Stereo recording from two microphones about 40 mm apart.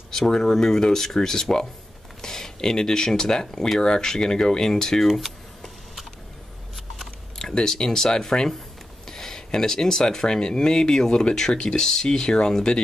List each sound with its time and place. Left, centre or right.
0.1 s speech: centre
5.0 s speech: centre
7.3 s speech: centre